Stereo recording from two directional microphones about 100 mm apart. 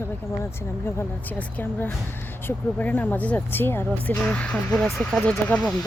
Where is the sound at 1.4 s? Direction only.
15° left (ahead or behind).